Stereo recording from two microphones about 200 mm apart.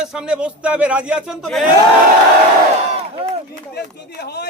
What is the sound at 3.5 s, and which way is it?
Speech, 55° left (ahead or behind).